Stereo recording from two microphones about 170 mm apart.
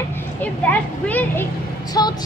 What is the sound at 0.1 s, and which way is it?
Speech, 10° left (ahead or behind).